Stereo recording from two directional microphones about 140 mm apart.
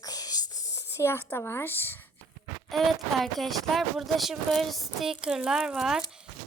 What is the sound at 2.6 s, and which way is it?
A woman's voice, centre (ahead or behind).